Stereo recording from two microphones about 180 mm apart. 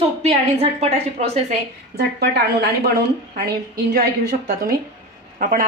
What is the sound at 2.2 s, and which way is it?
A woman's voice, 65° right (ahead or behind).